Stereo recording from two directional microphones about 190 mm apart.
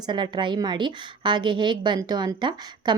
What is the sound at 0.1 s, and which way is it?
A woman's voice, 25° right (ahead or behind).